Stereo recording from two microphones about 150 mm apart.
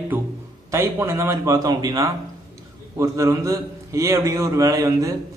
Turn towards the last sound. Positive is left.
turn(degrees=-20)  # may be behind; listen again after turning